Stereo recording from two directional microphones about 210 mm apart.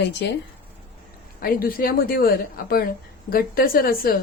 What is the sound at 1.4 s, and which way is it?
Speech, 45° left (ahead or behind).